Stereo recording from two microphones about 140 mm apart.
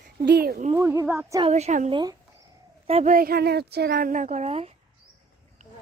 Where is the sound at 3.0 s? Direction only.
90° right.